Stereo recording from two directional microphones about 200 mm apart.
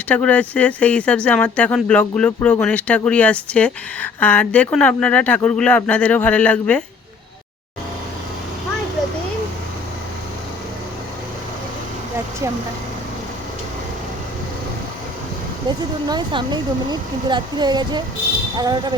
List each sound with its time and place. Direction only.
0.1 s speech: 5° left (ahead or behind)
16.0 s speech: 20° right (ahead or behind)